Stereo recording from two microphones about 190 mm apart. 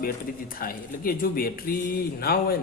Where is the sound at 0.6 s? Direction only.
50° left (ahead or behind).